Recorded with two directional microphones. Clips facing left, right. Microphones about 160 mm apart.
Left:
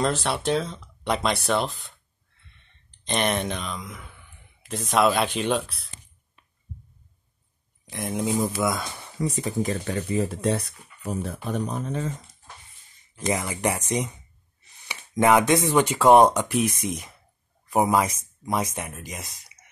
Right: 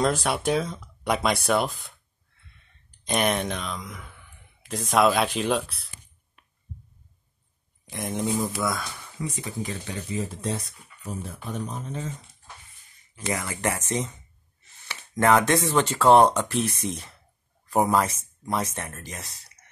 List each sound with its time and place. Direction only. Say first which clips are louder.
0.0 s speech: right 1 dB; 10° right (ahead or behind)
3.1 s speech: even; 5° right (ahead or behind)
7.9 s speech: left 1 dB; centre (ahead or behind)
8.4 s speech: left 3 dB; 20° left (ahead or behind)
9.2 s speech: left 6 dB; 40° left (ahead or behind)
10.1 s speech: left 5 dB; 65° left (ahead or behind)
13.3 s speech: left 2 dB; 20° left (ahead or behind)